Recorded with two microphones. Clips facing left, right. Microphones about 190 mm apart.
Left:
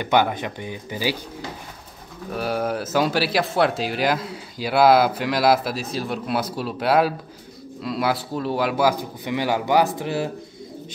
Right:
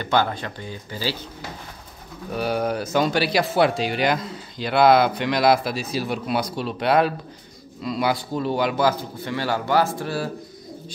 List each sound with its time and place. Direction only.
0.0 s a man's voice: 15° left (ahead or behind)
2.3 s a man's voice: centre (ahead or behind); by 10.3 s 20° left (ahead or behind)